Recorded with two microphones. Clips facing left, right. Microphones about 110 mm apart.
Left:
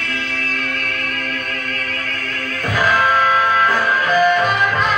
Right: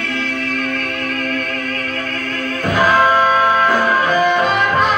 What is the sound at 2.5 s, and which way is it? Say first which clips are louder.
Music: right 3 dB; 20° right (ahead or behind).